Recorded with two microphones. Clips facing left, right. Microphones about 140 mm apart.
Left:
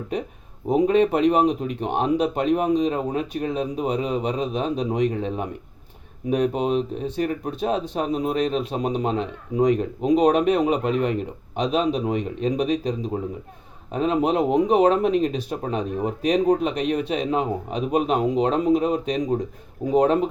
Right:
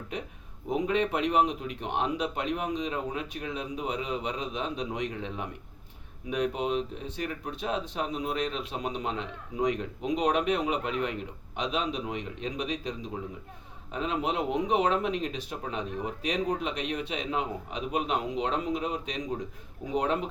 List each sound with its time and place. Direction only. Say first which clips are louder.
0.7 s speech: left 9 dB; 40° left (ahead or behind)
13.9 s a man's voice: left 9 dB; 40° left (ahead or behind)